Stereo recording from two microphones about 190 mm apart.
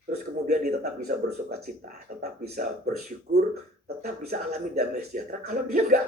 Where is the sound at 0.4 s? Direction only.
40° right (ahead or behind).